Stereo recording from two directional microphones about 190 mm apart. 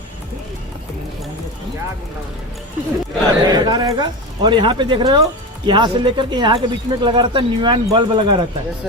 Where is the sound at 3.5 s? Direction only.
20° right (ahead or behind).